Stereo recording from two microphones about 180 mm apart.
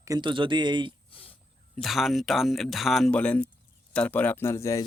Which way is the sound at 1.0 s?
30° left (ahead or behind).